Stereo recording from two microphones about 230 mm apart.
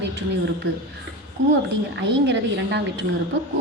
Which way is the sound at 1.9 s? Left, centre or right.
Right.